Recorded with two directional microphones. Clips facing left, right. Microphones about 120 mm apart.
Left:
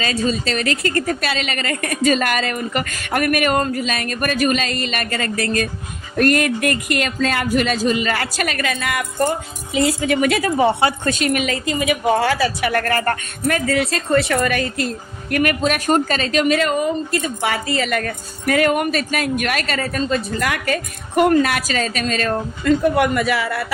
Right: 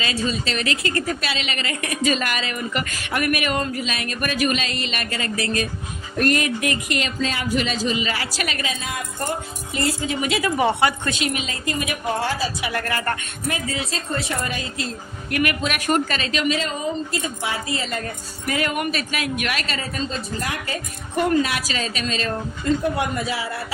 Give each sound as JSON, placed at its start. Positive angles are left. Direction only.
{"t": 0.0, "sound": "a woman's voice", "side_deg": 40}
{"t": 10.4, "sound": "a woman's voice", "side_deg": 30}
{"t": 11.0, "sound": "a woman's voice", "side_deg": 45}
{"t": 13.7, "sound": "a woman's voice", "side_deg": 65}
{"t": 15.3, "sound": "a woman's voice", "side_deg": 45}
{"t": 18.4, "sound": "a woman's voice", "side_deg": 50}
{"t": 21.2, "sound": "a woman's voice", "side_deg": 55}